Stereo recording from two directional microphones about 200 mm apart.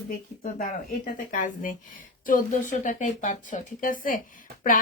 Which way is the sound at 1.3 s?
40° left (ahead or behind).